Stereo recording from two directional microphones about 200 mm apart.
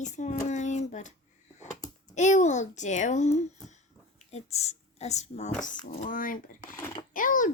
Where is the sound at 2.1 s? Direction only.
35° left (ahead or behind).